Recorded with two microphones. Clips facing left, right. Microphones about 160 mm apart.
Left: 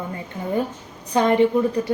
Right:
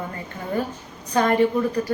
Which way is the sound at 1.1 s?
20° left (ahead or behind).